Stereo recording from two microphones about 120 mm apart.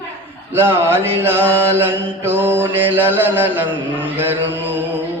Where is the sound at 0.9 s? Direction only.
20° right (ahead or behind).